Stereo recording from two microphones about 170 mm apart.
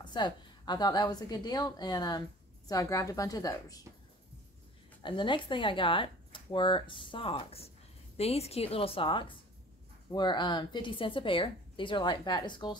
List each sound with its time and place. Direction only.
0.0 s speech: 25° left (ahead or behind)
5.0 s a woman's voice: 30° left (ahead or behind)